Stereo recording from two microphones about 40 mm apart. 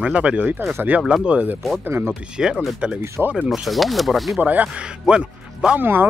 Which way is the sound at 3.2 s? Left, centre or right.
Right.